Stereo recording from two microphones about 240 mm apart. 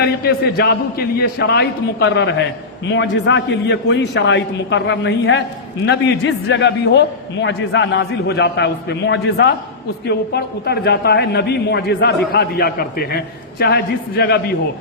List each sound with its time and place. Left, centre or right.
0.0 s a man's voice: left